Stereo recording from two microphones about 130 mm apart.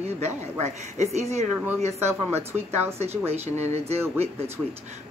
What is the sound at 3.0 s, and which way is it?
Speech, 55° right (ahead or behind).